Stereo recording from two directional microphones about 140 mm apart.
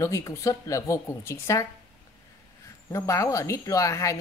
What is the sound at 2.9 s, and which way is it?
Speech, 20° left (ahead or behind).